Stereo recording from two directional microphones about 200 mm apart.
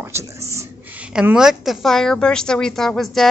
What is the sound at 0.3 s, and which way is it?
A woman's voice, 15° right (ahead or behind).